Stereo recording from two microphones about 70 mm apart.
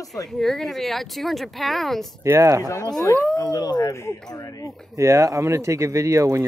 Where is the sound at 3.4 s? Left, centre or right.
Left.